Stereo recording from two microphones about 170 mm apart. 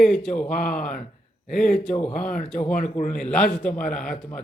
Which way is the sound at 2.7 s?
50° left (ahead or behind).